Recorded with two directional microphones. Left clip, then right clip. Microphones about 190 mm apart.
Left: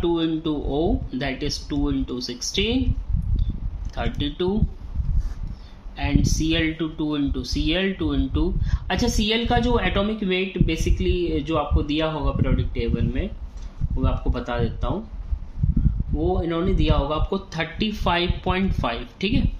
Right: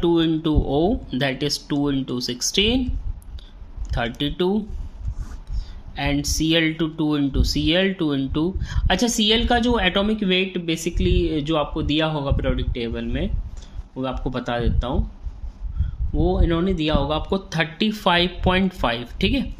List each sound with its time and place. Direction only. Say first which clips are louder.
0.0 s speech: right 3 dB; 50° right (ahead or behind)
4.2 s speech: right 2 dB; 45° right (ahead or behind)
5.9 s speech: right 2 dB; 45° right (ahead or behind)
16.2 s speech: right 2 dB; 45° right (ahead or behind)